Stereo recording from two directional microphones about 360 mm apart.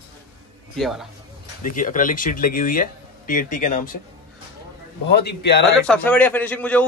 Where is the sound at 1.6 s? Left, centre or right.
Left.